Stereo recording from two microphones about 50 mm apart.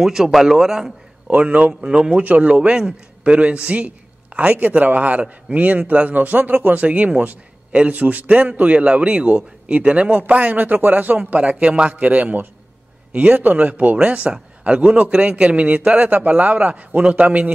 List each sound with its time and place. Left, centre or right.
0.0 s a man's voice: centre
1.2 s a man's voice: right
11.3 s a man's voice: right